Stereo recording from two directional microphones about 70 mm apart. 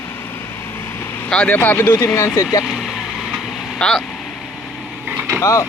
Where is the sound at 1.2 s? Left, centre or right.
Centre; by 2.3 s left.